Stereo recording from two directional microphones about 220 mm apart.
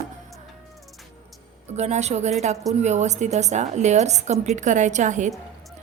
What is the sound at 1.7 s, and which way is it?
A woman's voice, 30° right (ahead or behind).